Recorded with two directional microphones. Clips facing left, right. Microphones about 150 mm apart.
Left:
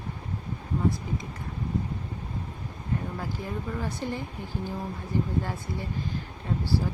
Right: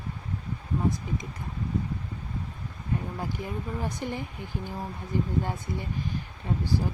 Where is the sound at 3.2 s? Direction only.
15° right (ahead or behind).